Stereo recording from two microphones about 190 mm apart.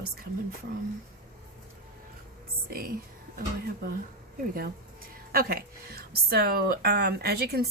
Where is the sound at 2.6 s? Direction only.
50° right (ahead or behind).